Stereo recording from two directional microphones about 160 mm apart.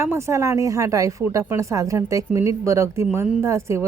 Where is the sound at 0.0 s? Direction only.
15° right (ahead or behind).